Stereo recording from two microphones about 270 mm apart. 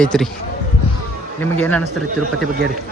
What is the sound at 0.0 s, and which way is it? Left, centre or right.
Speech, centre.